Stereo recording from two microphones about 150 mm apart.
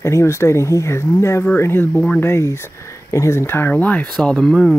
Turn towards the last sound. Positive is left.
turn(degrees=5)  # may be behind; listen again after turning